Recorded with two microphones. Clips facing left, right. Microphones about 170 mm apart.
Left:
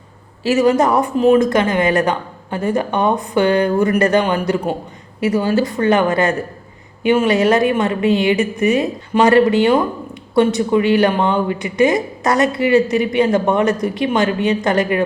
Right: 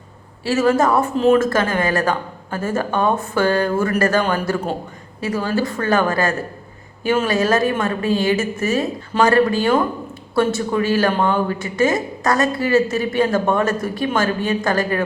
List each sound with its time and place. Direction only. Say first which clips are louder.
0.4 s a woman's voice: left 3 dB; 15° left (ahead or behind)